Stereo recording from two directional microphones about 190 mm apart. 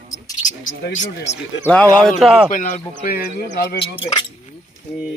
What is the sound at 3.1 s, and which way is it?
Speech, 55° left (ahead or behind).